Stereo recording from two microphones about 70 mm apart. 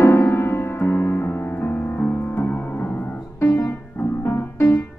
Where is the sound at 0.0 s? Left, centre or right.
Left.